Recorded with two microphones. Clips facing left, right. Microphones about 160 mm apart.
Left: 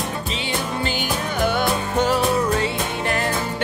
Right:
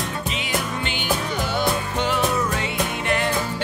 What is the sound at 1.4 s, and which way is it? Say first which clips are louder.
Music: left 3 dB; 55° left (ahead or behind).